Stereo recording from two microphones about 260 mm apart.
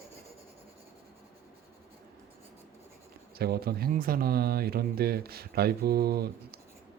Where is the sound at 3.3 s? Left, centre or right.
Right.